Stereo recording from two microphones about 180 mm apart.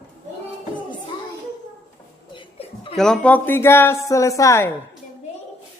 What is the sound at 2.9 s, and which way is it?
A woman's voice, 5° left (ahead or behind).